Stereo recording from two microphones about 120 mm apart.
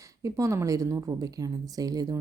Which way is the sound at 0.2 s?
25° right (ahead or behind).